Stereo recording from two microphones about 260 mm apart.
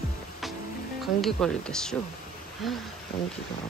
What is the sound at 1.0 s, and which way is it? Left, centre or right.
Speech, centre.